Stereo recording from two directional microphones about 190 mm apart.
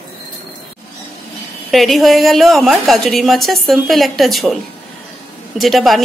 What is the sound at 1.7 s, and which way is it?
Speech, centre (ahead or behind).